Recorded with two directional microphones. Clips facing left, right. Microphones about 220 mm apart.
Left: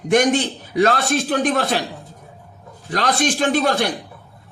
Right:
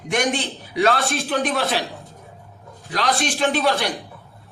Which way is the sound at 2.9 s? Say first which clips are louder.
Left 3 dB; 45° left (ahead or behind).